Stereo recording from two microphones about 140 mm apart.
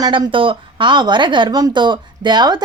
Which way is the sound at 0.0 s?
35° right (ahead or behind).